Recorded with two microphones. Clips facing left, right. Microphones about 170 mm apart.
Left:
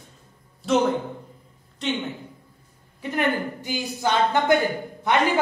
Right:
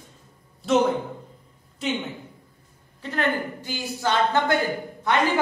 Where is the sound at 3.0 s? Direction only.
15° left (ahead or behind).